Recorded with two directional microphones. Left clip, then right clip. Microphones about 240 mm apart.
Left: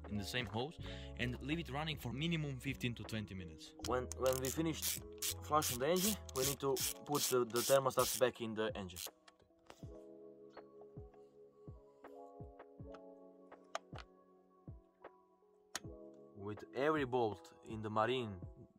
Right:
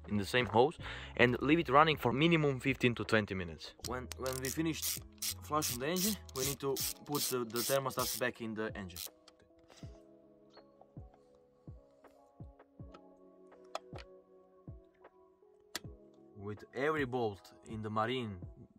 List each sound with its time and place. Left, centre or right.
0.0 s speech: centre
3.9 s speech: left
16.4 s speech: left